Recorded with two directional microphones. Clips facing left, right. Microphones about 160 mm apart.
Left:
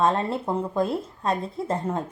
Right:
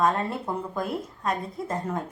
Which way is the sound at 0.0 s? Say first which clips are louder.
Left 2 dB; 25° left (ahead or behind).